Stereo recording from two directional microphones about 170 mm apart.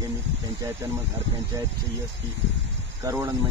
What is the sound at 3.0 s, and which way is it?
Speech, 20° right (ahead or behind).